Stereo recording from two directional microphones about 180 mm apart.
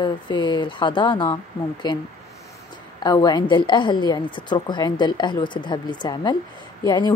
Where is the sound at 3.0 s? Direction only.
20° left (ahead or behind).